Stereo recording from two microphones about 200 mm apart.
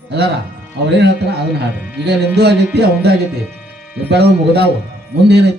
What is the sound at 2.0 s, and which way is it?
A man's voice, 55° right (ahead or behind).